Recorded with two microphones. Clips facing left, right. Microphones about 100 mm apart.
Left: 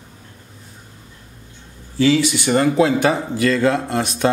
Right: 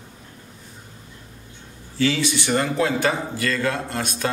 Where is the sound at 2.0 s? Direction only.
20° left (ahead or behind).